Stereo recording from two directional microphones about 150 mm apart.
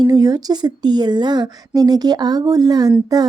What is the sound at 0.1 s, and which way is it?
A woman's voice, 25° right (ahead or behind).